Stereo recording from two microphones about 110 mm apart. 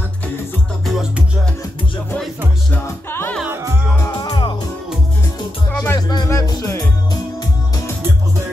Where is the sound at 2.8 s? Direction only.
20° left (ahead or behind).